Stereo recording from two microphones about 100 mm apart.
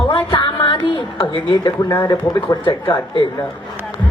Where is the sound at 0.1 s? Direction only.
55° left (ahead or behind).